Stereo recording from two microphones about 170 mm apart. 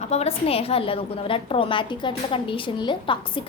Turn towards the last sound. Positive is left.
turn(degrees=30)  # may be behind; listen again after turning